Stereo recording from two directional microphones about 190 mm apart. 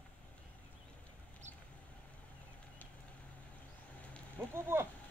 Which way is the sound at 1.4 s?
40° right (ahead or behind).